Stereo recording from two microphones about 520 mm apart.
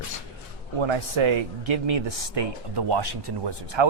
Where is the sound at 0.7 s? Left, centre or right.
Right.